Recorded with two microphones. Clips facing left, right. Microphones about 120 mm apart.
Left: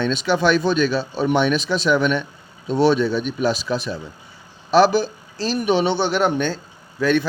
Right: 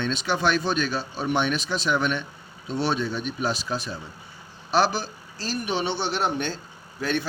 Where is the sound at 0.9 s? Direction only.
90° left; by 6.3 s 60° left (ahead or behind).